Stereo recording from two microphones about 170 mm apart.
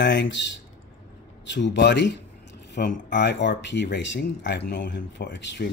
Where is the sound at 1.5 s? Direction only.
90° left.